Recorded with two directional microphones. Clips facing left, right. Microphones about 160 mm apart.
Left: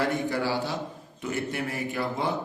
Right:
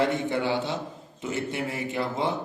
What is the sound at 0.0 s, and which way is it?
A man's voice, 20° right (ahead or behind).